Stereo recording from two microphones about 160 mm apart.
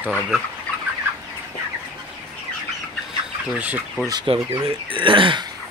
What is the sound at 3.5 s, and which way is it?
Speech, 10° right (ahead or behind).